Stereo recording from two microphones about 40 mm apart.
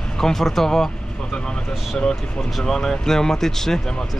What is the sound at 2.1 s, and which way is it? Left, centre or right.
Speech, centre.